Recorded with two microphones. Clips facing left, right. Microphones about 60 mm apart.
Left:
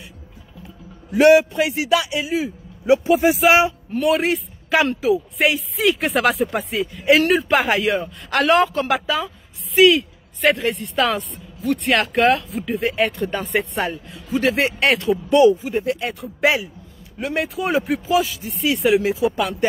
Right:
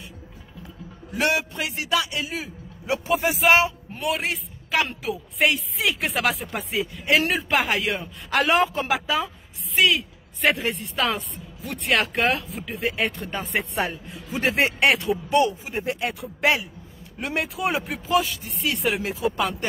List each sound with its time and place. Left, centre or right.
1.1 s a man's voice: left; by 14.0 s centre
14.1 s a man's voice: right
14.8 s speech: centre
15.7 s a man's voice: right
16.0 s speech: centre